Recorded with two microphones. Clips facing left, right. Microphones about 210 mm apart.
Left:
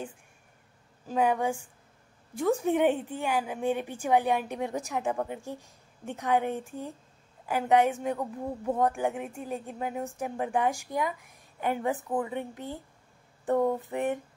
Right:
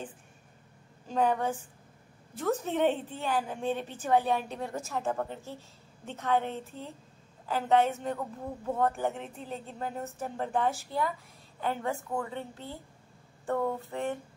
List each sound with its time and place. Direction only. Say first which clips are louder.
1.0 s a woman's voice: left 2 dB; 10° left (ahead or behind)